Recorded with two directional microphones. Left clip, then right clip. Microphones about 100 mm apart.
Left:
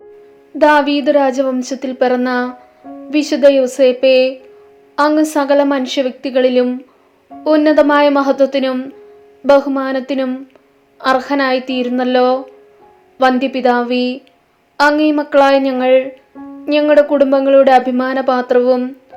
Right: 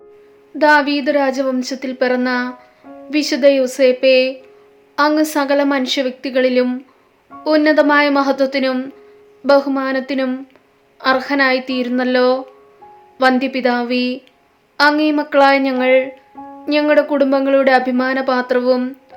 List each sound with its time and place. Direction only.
0.6 s speech: 15° left (ahead or behind)
3.1 s speech: 5° left (ahead or behind)